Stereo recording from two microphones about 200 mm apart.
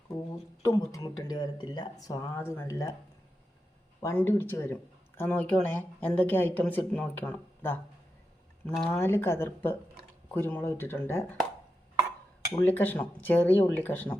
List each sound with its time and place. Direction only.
0.6 s speech: 15° left (ahead or behind)
4.0 s speech: 10° left (ahead or behind)
12.6 s speech: 10° left (ahead or behind)